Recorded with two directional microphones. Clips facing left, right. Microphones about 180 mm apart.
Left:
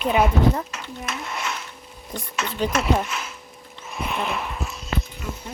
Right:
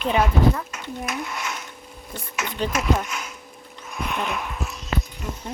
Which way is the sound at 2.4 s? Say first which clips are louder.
Left 1 dB; 60° left (ahead or behind).